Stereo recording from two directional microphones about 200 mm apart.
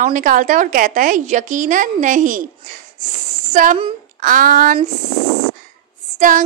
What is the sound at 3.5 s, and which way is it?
A woman's voice, 40° right (ahead or behind).